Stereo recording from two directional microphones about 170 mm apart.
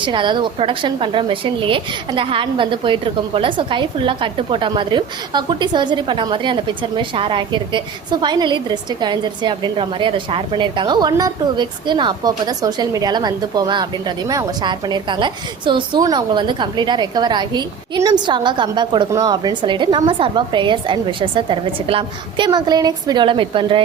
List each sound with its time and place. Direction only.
0.0 s a woman's voice: 30° right (ahead or behind)